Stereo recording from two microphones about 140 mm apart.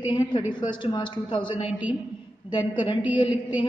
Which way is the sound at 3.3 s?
10° right (ahead or behind).